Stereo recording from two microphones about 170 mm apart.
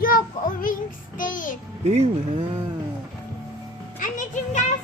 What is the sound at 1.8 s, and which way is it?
Speech, 40° right (ahead or behind).